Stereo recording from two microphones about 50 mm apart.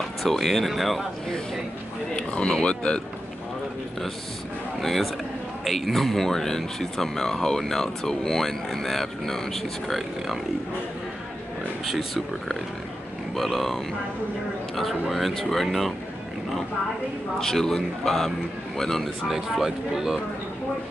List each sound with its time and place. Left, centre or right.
0.2 s speech: centre
2.1 s speech: centre
4.7 s a man's voice: centre
11.8 s speech: centre
14.8 s speech: centre
17.4 s a man's voice: centre
19.2 s speech: centre